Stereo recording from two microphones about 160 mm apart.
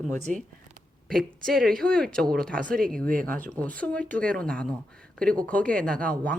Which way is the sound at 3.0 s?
60° right (ahead or behind).